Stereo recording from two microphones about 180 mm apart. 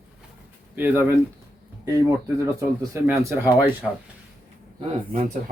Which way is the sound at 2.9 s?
15° right (ahead or behind).